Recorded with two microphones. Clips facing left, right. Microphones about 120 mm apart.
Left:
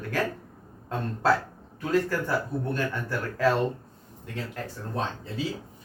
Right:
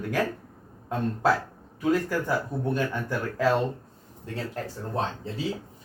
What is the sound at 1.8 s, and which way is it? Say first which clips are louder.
Speech: right 1 dB; 15° right (ahead or behind).